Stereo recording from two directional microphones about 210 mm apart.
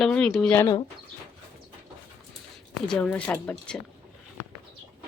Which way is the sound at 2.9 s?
5° left (ahead or behind).